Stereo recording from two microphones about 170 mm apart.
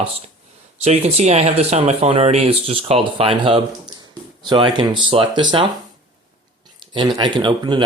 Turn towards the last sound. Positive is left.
turn(degrees=-25)  # may be behind; listen again after turning